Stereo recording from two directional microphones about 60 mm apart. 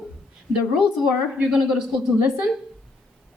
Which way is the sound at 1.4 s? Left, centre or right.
Centre.